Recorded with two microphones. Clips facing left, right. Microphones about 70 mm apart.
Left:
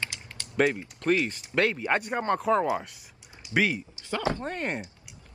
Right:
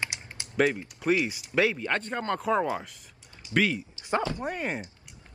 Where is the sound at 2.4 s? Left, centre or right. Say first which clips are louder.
Even; centre.